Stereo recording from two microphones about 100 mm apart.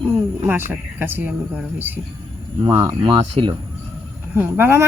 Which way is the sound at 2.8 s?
45° right (ahead or behind).